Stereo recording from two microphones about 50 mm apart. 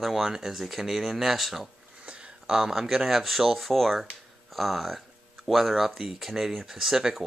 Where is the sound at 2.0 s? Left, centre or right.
Right.